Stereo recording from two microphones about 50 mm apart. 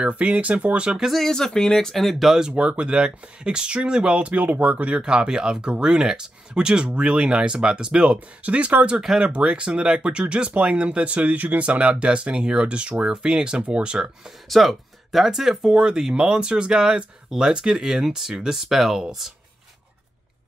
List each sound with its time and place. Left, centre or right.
0.0 s speech: right
1.1 s speech: centre
2.4 s speech: right
14.5 s speech: centre